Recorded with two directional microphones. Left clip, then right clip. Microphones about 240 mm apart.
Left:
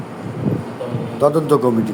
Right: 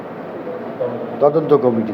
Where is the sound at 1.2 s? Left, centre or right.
Left.